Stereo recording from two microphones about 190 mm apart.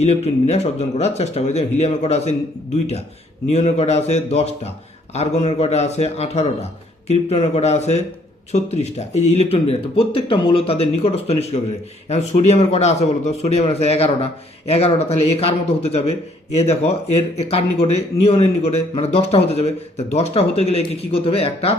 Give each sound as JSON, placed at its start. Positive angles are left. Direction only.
{"t": 0.0, "sound": "speech", "side_deg": 35}
{"t": 3.5, "sound": "speech", "side_deg": 35}